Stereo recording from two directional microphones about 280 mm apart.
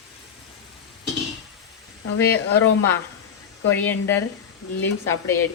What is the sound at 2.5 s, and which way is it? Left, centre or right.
A woman's voice, centre.